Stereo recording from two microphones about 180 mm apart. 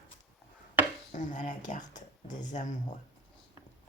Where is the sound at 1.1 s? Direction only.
45° left (ahead or behind).